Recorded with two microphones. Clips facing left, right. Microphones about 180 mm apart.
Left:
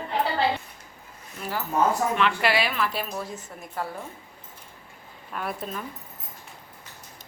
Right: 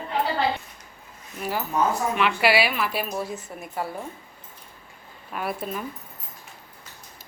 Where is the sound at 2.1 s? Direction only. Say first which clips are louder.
Right 2 dB; 10° right (ahead or behind).